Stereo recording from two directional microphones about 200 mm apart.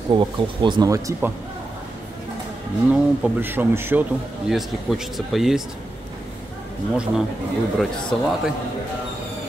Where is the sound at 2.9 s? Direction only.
10° right (ahead or behind).